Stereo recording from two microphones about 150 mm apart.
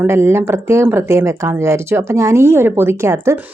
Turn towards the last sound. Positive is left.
turn(degrees=-20)  # may be behind; listen again after turning